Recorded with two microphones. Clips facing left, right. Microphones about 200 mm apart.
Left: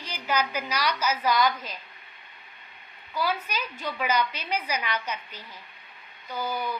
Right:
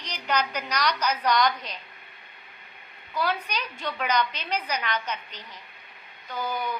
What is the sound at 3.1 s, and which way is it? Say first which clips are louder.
A woman's voice: right 1 dB; 5° left (ahead or behind).